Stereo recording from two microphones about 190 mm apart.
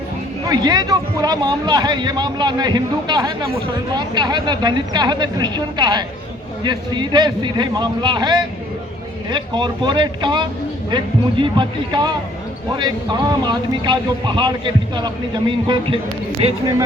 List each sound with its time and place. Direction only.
0.4 s a man's voice: 20° right (ahead or behind)
15.6 s a man's voice: 25° right (ahead or behind)